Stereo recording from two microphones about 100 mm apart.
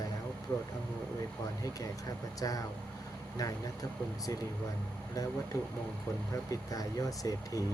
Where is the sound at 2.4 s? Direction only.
35° left (ahead or behind).